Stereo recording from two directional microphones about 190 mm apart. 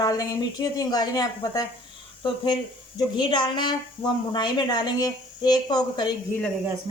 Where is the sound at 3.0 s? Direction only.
25° left (ahead or behind).